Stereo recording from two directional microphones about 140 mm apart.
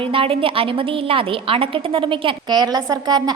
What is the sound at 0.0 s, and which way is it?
A woman's voice, 40° right (ahead or behind).